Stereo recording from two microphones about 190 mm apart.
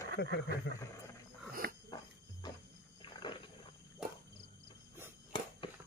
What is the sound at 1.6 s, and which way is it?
Dog, 60° right (ahead or behind).